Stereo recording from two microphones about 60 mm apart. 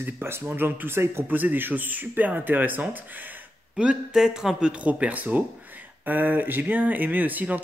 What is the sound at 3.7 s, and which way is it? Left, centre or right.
Speech, centre.